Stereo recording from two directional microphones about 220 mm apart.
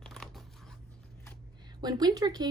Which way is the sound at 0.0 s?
Centre (ahead or behind).